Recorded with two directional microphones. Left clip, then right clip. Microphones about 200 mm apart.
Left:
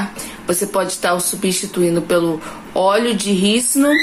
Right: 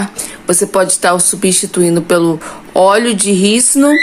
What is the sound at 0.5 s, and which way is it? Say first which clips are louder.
Speech: right 6 dB; 30° right (ahead or behind).